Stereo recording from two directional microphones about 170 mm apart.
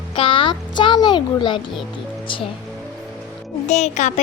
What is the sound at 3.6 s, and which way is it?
Speech, 45° left (ahead or behind).